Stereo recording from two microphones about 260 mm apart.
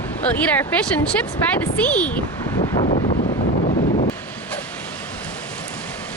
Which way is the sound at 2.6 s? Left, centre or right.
Left.